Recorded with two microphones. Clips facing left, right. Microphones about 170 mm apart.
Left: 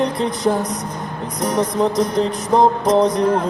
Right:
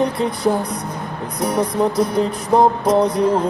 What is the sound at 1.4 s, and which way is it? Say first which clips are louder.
Music: even; 10° right (ahead or behind).